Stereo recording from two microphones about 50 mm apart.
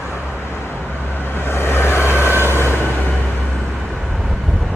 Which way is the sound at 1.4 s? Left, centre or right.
Left.